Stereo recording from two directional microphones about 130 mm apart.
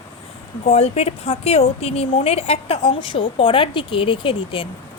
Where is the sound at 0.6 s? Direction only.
55° left (ahead or behind).